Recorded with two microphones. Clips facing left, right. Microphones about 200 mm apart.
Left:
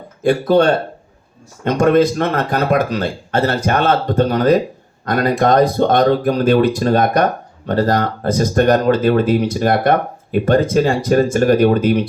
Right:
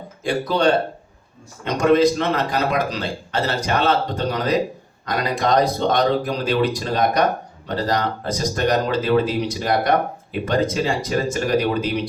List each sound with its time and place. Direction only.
0.2 s speech: 55° left (ahead or behind)